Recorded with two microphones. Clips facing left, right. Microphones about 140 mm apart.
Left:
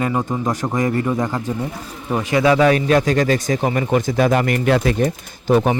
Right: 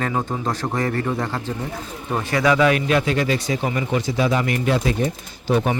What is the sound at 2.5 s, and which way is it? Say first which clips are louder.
A man's voice: left 3 dB; 35° left (ahead or behind).